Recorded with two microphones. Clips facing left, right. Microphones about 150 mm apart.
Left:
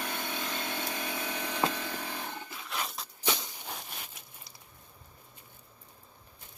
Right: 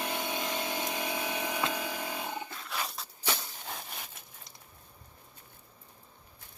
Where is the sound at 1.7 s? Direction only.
10° right (ahead or behind).